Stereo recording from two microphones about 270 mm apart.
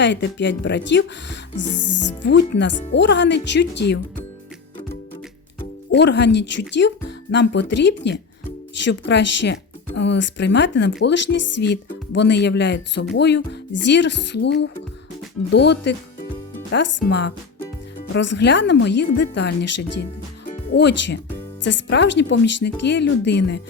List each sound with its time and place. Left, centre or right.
0.0 s speech: left
5.9 s speech: left